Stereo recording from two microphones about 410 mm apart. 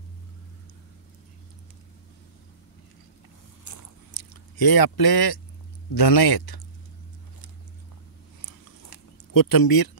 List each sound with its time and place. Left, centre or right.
3.6 s biting: left
4.2 s speech: left
8.4 s a sound: left